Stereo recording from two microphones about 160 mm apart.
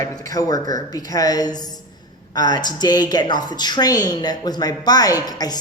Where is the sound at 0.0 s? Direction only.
20° left (ahead or behind).